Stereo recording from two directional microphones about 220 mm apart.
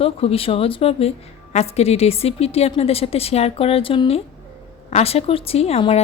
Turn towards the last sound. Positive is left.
turn(degrees=25)  # may be behind; listen again after turning